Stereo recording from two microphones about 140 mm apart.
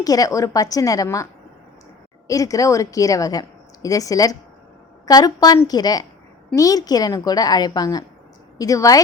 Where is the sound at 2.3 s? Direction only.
25° left (ahead or behind).